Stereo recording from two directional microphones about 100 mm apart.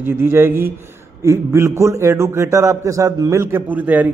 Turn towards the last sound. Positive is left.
turn(degrees=-15)  # may be behind; listen again after turning